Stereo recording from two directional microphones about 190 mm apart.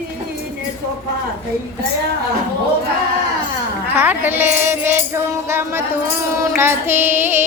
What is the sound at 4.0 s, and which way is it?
Music, 10° right (ahead or behind).